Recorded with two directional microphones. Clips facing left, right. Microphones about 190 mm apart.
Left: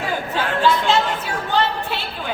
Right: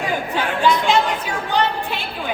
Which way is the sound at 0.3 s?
15° right (ahead or behind).